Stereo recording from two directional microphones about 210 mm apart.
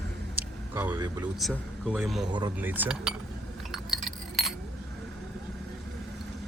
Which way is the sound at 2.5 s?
10° right (ahead or behind).